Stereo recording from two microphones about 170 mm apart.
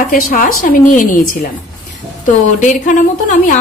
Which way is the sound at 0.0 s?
55° left (ahead or behind).